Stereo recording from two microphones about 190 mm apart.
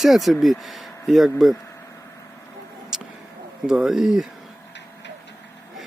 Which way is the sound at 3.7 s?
5° right (ahead or behind).